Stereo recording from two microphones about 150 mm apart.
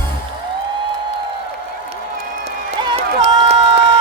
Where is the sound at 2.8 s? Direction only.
35° right (ahead or behind).